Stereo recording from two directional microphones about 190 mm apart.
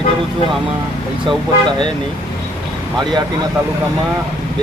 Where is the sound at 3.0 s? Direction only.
25° right (ahead or behind).